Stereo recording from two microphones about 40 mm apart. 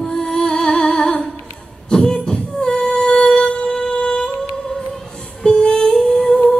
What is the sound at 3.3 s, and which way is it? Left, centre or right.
Music, left.